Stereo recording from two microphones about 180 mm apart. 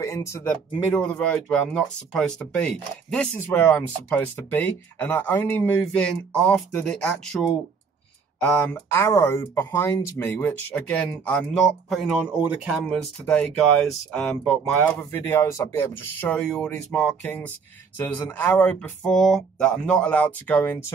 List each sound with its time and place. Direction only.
0.0 s speech: 15° left (ahead or behind)
8.4 s speech: 5° left (ahead or behind)
14.1 s speech: 5° left (ahead or behind)